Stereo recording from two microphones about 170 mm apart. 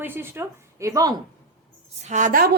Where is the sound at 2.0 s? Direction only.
45° right (ahead or behind).